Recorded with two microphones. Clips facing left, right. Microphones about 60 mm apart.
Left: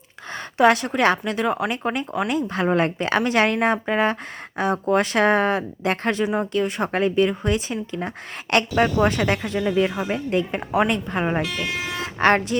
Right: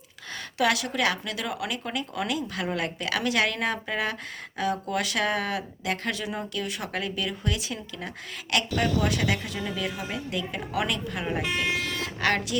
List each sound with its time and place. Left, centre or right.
0.5 s a woman's voice: left
11.4 s speech: centre
11.8 s vehicle: centre
12.2 s a woman's voice: left